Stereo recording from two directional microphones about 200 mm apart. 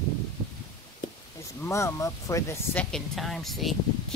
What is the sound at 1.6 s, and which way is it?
Speech, 15° left (ahead or behind).